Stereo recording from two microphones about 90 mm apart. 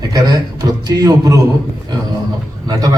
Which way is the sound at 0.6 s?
45° right (ahead or behind).